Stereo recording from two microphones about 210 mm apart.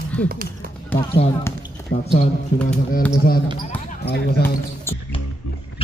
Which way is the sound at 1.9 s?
45° left (ahead or behind).